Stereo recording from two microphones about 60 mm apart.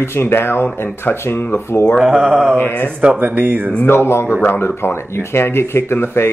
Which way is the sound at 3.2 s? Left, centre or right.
Right.